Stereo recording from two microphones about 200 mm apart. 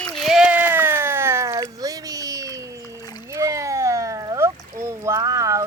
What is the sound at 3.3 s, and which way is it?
Boat, 15° right (ahead or behind).